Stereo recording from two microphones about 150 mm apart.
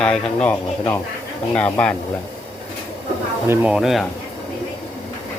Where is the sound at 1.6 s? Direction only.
10° left (ahead or behind).